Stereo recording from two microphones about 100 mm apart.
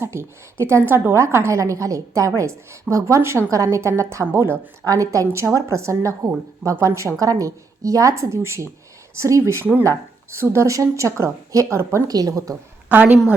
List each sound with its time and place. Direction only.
0.0 s a woman's voice: 25° right (ahead or behind)
4.9 s a woman's voice: 35° right (ahead or behind)
12.9 s a woman's voice: 20° right (ahead or behind)